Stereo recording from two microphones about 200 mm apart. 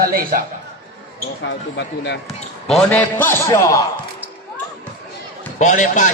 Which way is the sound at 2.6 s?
5° left (ahead or behind).